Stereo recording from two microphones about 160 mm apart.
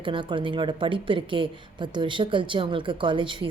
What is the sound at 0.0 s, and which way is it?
A woman's voice, 30° right (ahead or behind).